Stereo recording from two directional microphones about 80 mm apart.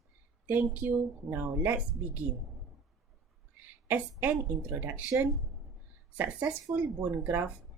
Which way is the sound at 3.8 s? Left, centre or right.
Right.